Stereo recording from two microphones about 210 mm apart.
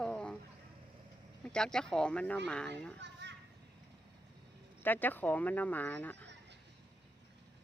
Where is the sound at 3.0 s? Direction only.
55° right (ahead or behind).